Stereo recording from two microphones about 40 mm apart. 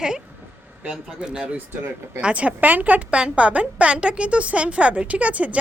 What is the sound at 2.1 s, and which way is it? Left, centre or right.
A woman's voice, right.